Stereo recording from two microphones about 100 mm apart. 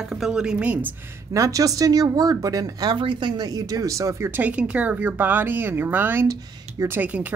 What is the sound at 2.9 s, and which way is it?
A woman's voice, 55° right (ahead or behind).